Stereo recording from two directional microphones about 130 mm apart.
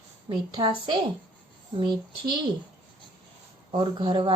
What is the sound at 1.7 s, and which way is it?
Speech, 40° right (ahead or behind).